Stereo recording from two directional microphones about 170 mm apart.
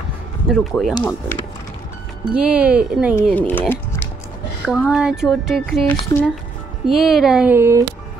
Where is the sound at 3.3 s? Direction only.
10° left (ahead or behind).